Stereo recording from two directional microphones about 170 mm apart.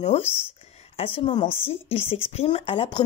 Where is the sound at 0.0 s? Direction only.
40° left (ahead or behind).